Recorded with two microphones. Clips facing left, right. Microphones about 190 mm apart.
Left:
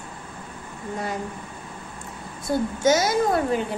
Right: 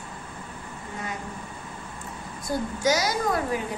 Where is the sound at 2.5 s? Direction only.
25° left (ahead or behind).